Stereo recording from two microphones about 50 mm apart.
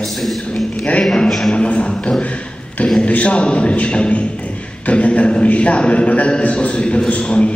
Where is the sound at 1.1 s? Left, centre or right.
Centre.